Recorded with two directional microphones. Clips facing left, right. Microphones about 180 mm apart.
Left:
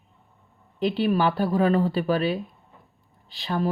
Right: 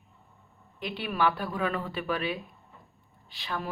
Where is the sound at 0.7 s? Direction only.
30° left (ahead or behind).